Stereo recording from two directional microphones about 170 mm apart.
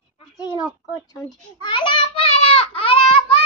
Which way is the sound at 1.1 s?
20° left (ahead or behind).